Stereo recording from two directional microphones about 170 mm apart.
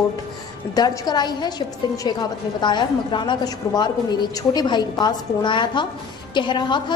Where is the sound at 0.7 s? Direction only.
25° left (ahead or behind).